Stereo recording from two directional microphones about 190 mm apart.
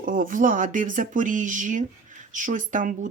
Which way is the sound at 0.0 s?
45° right (ahead or behind).